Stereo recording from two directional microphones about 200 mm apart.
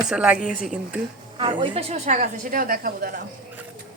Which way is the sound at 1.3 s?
25° right (ahead or behind).